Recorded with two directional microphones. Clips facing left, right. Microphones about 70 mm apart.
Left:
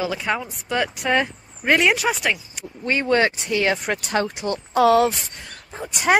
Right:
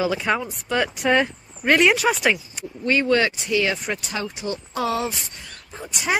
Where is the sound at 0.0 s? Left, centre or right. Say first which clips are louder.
Right 2 dB; centre.